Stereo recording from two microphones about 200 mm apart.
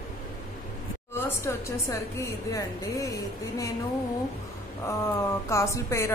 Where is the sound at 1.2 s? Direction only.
15° left (ahead or behind).